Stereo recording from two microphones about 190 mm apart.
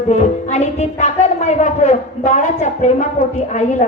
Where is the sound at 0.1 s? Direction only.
35° left (ahead or behind).